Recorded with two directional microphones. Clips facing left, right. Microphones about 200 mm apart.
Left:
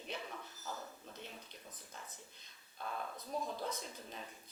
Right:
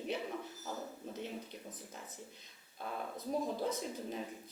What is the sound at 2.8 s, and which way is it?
Speech, 15° right (ahead or behind).